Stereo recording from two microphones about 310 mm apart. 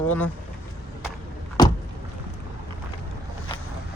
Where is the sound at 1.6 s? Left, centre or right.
Centre.